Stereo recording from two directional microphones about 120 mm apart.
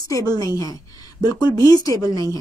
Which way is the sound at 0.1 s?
30° left (ahead or behind).